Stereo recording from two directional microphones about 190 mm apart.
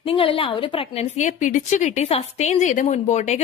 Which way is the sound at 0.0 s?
30° left (ahead or behind).